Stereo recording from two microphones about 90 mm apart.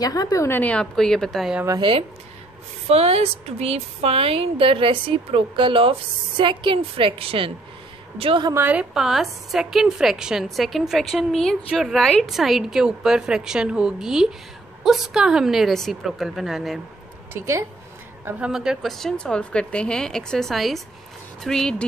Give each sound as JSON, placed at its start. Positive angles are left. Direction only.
{"t": 0.0, "sound": "a woman's voice", "side_deg": 45}
{"t": 0.5, "sound": "speech", "side_deg": 15}
{"t": 0.9, "sound": "a woman's voice", "side_deg": 5}
{"t": 1.8, "sound": "speech", "side_deg": -70}
{"t": 3.6, "sound": "a woman's voice", "side_deg": -90}
{"t": 8.5, "sound": "a woman's voice", "side_deg": -20}
{"t": 8.9, "sound": "a woman's voice", "side_deg": -5}
{"t": 17.3, "sound": "a woman's voice", "side_deg": -30}
{"t": 18.5, "sound": "a woman's voice", "side_deg": -5}